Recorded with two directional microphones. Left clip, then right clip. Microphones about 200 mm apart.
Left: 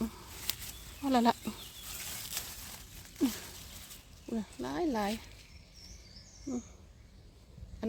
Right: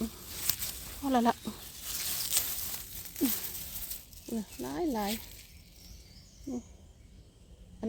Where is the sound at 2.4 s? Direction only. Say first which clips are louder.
Right 8 dB; 35° right (ahead or behind).